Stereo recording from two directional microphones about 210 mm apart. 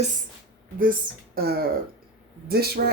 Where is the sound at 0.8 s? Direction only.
45° right (ahead or behind).